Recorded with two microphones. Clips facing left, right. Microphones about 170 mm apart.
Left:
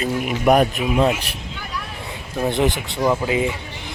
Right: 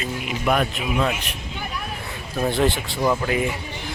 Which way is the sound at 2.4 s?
15° left (ahead or behind).